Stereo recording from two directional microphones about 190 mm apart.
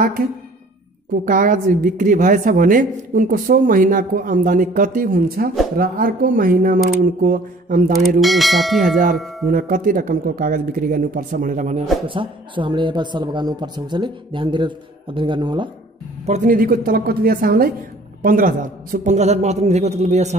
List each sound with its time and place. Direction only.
1.2 s a woman's voice: 45° right (ahead or behind)
8.2 s speech: centre (ahead or behind)
9.5 s a woman's voice: 45° right (ahead or behind)
12.1 s a man's voice: 25° right (ahead or behind)
16.3 s a woman's voice: 40° right (ahead or behind)